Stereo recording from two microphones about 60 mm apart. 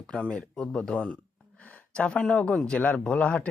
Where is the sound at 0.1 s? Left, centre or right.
Centre.